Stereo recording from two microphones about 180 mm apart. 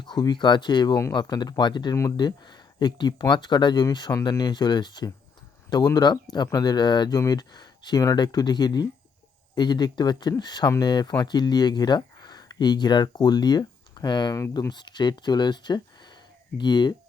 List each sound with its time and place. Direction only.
0.0 s speech: 25° left (ahead or behind)